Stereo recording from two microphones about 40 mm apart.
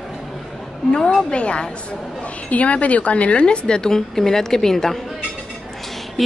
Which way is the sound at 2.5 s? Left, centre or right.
Left.